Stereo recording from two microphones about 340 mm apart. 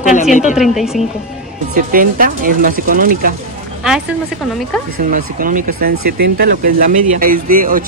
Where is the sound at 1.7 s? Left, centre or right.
Right.